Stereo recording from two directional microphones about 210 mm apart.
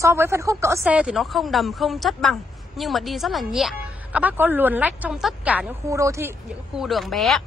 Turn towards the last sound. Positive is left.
turn(degrees=0)  # may be behind; listen again after turning